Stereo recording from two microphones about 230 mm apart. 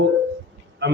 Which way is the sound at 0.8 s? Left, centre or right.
Right.